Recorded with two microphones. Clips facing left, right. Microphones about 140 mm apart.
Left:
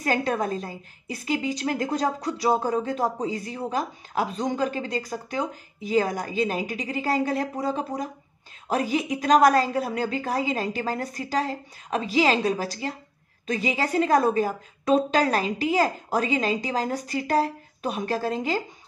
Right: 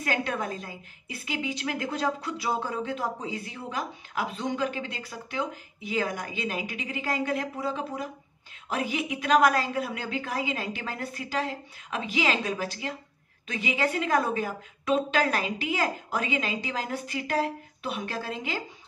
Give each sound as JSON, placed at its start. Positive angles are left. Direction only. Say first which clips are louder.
{"t": 0.0, "sound": "a woman's voice", "louder": "left 5 dB", "side_deg": 40}